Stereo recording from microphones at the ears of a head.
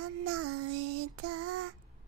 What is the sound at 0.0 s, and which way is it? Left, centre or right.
Child singing, right.